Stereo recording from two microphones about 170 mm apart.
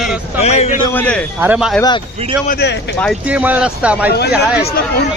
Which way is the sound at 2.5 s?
75° left (ahead or behind).